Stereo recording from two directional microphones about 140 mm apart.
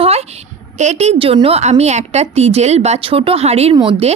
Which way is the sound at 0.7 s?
55° right (ahead or behind).